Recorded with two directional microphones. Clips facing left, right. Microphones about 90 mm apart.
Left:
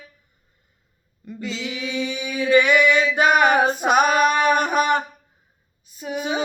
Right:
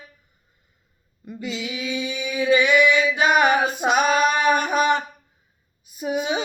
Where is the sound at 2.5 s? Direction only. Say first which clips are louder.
Left 1 dB; 50° left (ahead or behind).